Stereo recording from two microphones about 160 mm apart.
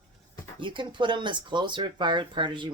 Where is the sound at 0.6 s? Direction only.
30° right (ahead or behind).